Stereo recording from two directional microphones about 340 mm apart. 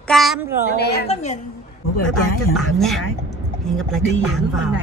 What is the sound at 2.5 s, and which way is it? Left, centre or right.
Speech, centre.